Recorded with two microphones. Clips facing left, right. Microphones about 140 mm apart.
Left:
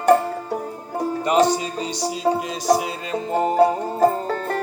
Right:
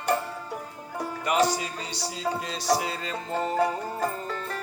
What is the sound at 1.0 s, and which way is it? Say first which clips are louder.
Music: left 7 dB; 25° left (ahead or behind).